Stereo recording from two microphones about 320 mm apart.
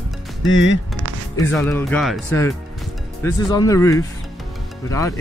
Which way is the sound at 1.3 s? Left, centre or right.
Centre.